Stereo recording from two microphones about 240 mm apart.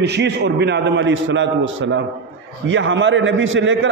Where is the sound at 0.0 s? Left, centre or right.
Right.